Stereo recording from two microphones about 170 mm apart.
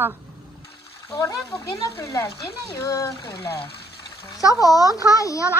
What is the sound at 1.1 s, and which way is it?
Speech, 20° left (ahead or behind).